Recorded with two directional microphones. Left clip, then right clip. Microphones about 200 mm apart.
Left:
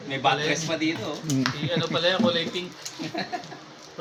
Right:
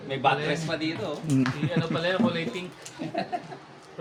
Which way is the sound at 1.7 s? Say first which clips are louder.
Left 3 dB; 20° left (ahead or behind).